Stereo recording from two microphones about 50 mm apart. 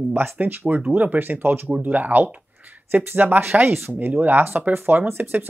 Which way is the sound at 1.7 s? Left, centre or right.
Right.